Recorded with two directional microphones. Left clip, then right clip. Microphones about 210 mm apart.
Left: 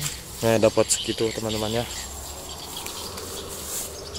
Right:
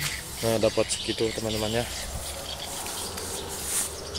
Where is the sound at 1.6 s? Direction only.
10° left (ahead or behind).